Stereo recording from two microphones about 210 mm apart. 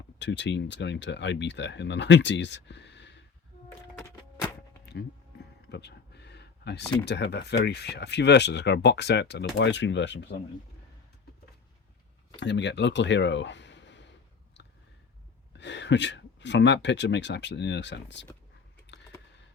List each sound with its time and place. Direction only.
0.2 s speech: 55° left (ahead or behind)
3.9 s music: 15° left (ahead or behind)
5.6 s a sound: 50° left (ahead or behind)
7.0 s speech: 55° left (ahead or behind)
12.4 s speech: 55° left (ahead or behind)
15.5 s speech: 55° left (ahead or behind)